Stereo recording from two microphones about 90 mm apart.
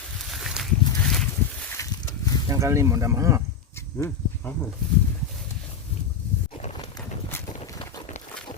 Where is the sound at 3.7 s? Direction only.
25° left (ahead or behind).